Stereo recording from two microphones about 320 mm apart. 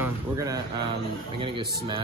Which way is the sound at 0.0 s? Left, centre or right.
Centre.